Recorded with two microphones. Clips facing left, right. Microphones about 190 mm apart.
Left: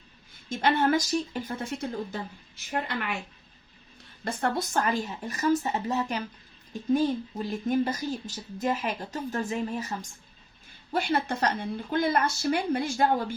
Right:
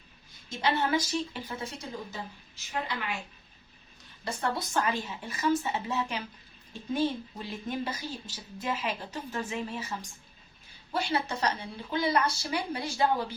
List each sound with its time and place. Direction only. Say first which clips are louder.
0.5 s a woman's voice: left 4 dB; 50° left (ahead or behind)
4.2 s a woman's voice: left 4 dB; 55° left (ahead or behind)
10.9 s a woman's voice: left 3 dB; 50° left (ahead or behind)